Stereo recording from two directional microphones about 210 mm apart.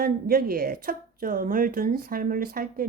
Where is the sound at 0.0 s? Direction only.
45° right (ahead or behind).